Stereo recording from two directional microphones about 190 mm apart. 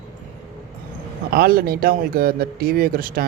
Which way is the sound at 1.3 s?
55° right (ahead or behind).